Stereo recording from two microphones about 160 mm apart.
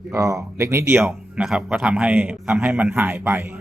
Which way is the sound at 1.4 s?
5° right (ahead or behind).